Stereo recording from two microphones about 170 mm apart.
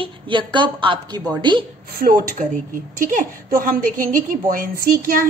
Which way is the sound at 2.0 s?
55° right (ahead or behind).